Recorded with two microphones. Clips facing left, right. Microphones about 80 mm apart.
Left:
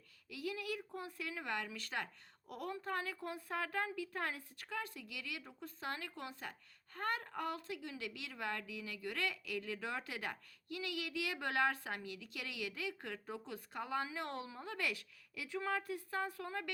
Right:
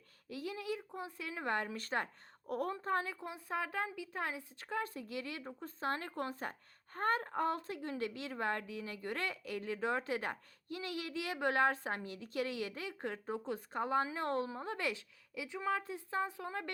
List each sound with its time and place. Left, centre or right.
0.3 s a woman's voice: right